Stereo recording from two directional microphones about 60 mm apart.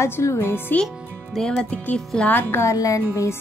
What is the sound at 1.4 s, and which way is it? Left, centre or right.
Music, centre.